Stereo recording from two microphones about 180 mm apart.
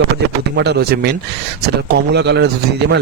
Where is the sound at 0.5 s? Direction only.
70° right (ahead or behind).